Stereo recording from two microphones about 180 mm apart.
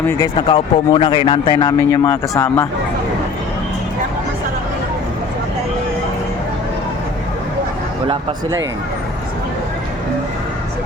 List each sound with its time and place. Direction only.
0.2 s speech: 25° left (ahead or behind)
1.9 s speech: 15° left (ahead or behind)